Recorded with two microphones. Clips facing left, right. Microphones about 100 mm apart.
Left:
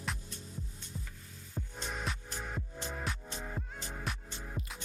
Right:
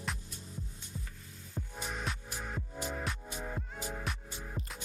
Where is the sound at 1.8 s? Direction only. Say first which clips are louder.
Even; 10° right (ahead or behind).